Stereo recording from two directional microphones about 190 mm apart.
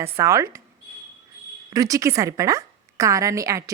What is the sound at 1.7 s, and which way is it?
A woman's voice, 15° right (ahead or behind).